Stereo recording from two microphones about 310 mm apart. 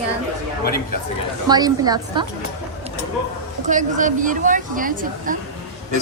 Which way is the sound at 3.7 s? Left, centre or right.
Right.